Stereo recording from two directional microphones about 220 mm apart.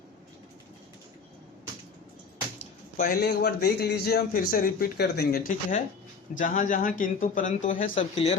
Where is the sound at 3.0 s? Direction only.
45° left (ahead or behind).